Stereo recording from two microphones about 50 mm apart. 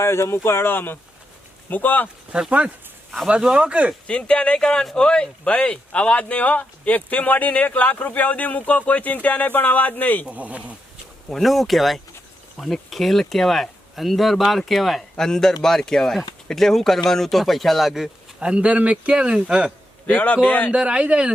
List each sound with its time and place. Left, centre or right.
0.0 s speech: left
2.3 s speech: centre
4.0 s speech: left
10.2 s speech: right
11.3 s speech: centre
18.3 s speech: right
20.1 s speech: left
20.7 s speech: right